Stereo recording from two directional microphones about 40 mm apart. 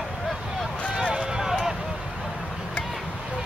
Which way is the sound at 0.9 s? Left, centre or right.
Right.